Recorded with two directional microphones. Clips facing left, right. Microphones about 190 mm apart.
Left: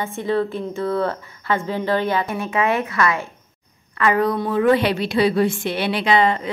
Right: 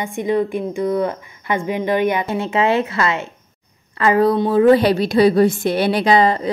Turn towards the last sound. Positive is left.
turn(degrees=-35)  # may be behind; listen again after turning